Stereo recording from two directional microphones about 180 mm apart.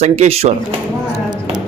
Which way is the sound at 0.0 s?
35° right (ahead or behind).